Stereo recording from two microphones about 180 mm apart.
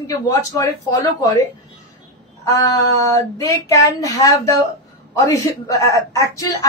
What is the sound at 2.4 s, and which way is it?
A woman's voice, 20° left (ahead or behind).